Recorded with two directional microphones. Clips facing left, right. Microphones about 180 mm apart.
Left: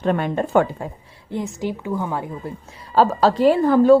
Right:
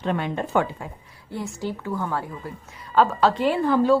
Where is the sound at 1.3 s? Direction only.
15° left (ahead or behind).